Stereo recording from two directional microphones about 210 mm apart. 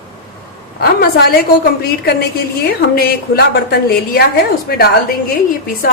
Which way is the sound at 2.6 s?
45° left (ahead or behind).